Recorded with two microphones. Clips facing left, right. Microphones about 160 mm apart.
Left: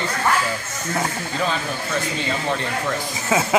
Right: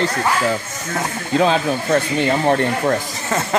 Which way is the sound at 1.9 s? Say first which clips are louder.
Right 8 dB; 60° right (ahead or behind).